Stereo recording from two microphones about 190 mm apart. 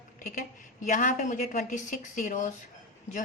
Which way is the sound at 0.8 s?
40° left (ahead or behind).